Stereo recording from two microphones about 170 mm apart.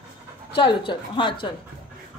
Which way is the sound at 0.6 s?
30° left (ahead or behind).